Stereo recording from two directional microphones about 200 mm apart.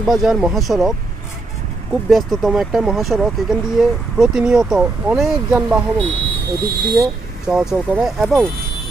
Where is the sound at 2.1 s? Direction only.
Centre (ahead or behind).